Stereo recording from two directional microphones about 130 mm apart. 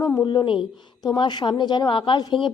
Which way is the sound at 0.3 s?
40° left (ahead or behind).